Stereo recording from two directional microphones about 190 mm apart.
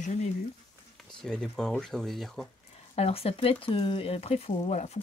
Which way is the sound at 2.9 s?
30° left (ahead or behind).